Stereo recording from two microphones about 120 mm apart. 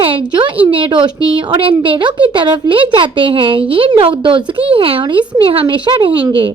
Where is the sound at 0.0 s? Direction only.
45° right (ahead or behind).